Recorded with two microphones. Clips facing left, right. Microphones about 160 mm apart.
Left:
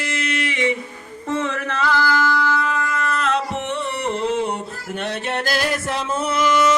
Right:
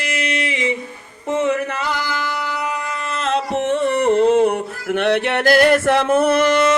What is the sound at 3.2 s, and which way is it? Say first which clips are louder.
Music: right 3 dB; 35° right (ahead or behind).